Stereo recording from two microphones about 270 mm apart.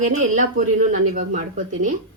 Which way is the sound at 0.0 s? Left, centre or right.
Right.